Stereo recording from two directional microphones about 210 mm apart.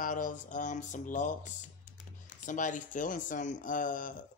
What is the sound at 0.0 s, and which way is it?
Speech, 40° left (ahead or behind).